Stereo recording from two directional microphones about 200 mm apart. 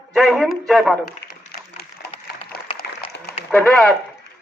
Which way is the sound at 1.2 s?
55° left (ahead or behind).